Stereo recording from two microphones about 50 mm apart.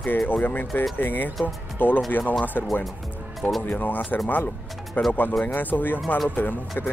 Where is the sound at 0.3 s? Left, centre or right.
Left.